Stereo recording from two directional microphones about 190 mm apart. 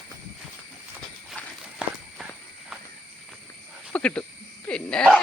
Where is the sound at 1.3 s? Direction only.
Centre (ahead or behind).